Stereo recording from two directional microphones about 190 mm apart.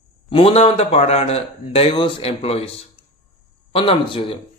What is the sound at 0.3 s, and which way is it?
Speech, 30° left (ahead or behind).